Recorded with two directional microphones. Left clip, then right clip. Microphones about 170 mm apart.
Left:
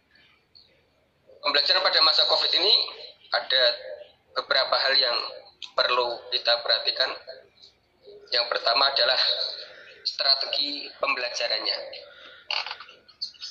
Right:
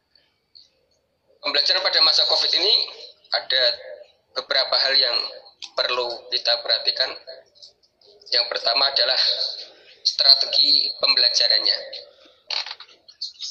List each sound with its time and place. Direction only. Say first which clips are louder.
1.4 s a man's voice: right 2 dB; 35° right (ahead or behind)
12.4 s frog: right 2 dB; 30° right (ahead or behind)